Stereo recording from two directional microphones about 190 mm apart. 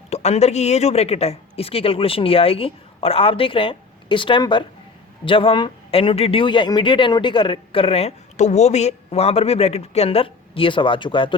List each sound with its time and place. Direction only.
0.1 s speech: 35° left (ahead or behind)